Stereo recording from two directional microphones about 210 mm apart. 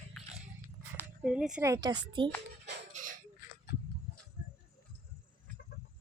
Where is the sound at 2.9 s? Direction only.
35° right (ahead or behind).